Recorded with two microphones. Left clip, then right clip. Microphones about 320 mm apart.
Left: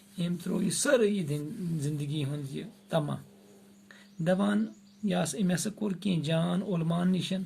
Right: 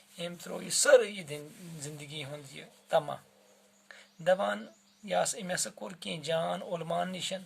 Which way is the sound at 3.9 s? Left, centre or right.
Right.